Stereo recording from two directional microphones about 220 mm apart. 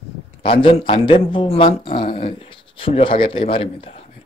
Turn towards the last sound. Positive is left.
turn(degrees=25)  # may be behind; listen again after turning